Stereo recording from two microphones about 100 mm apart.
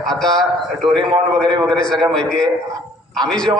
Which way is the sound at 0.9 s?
55° right (ahead or behind).